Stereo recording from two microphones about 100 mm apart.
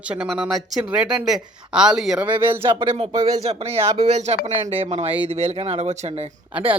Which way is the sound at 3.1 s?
45° right (ahead or behind).